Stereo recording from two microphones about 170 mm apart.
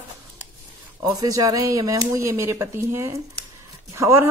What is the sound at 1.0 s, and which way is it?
A woman's voice, 20° right (ahead or behind).